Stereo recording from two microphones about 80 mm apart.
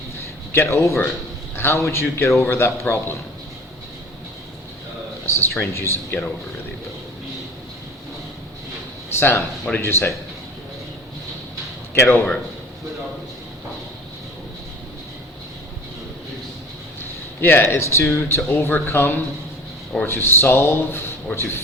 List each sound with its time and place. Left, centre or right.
0.5 s speech: left
5.2 s speech: left
9.1 s speech: left
11.9 s speech: left
17.4 s speech: left